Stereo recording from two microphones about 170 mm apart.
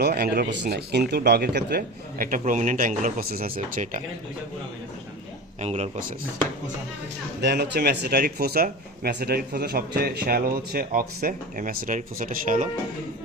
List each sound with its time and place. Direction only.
0.0 s speech: 65° right (ahead or behind); by 4.0 s 50° right (ahead or behind)
5.5 s speech: 40° right (ahead or behind)
7.4 s speech: 75° right (ahead or behind); by 12.6 s 50° right (ahead or behind)